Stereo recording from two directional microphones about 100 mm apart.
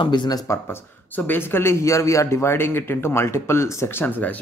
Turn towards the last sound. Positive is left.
turn(degrees=25)  # may be behind; listen again after turning